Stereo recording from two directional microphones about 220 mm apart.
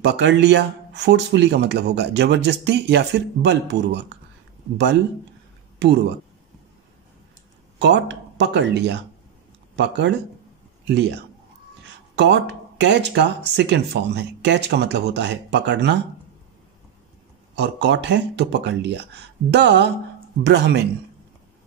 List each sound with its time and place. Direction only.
0.0 s speech: 50° right (ahead or behind)
7.8 s speech: 50° right (ahead or behind)
12.2 s speech: 50° right (ahead or behind)
17.6 s speech: 50° right (ahead or behind)